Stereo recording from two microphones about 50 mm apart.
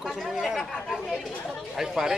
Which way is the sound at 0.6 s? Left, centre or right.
Centre.